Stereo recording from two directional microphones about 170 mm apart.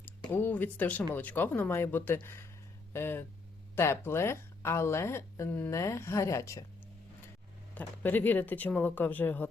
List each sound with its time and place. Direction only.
0.3 s speech: 10° left (ahead or behind)
7.8 s speech: 10° left (ahead or behind)